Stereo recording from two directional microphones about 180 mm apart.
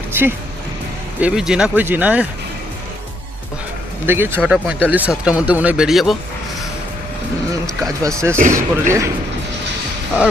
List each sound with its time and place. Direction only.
0.1 s music: 10° right (ahead or behind)
1.2 s speech: 5° right (ahead or behind)
4.0 s speech: 10° right (ahead or behind)
8.0 s speech: 15° right (ahead or behind)